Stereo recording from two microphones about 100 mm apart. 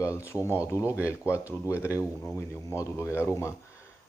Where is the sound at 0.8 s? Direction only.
15° right (ahead or behind).